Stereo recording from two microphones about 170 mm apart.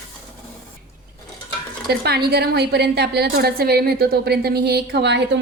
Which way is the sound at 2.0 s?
70° right (ahead or behind).